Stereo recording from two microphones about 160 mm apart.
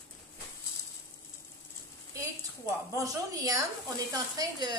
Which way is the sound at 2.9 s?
20° right (ahead or behind).